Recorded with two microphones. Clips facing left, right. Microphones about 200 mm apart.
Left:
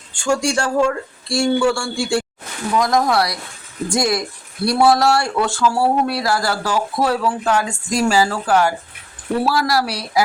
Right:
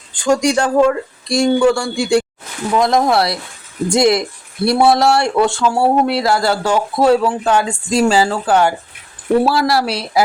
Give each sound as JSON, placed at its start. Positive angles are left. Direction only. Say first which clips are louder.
{"t": 0.3, "sound": "speech", "louder": "right 4 dB", "side_deg": -20}